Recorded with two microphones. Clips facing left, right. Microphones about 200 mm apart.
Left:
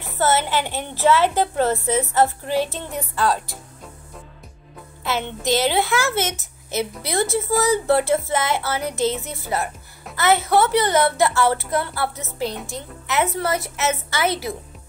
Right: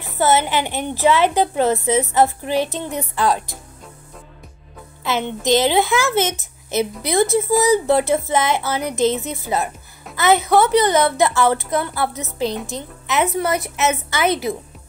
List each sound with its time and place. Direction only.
0.2 s a woman's voice: 15° right (ahead or behind)
5.0 s a woman's voice: 20° right (ahead or behind)